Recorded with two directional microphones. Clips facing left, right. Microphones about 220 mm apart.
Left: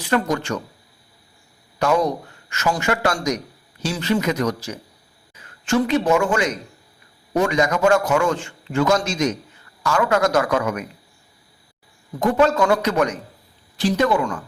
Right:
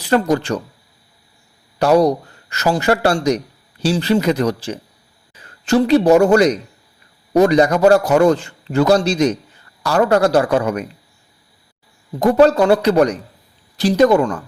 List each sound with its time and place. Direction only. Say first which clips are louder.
0.0 s speech: right 5 dB; 35° right (ahead or behind)
1.8 s speech: right 6 dB; 35° right (ahead or behind)
12.2 s speech: right 5 dB; 35° right (ahead or behind)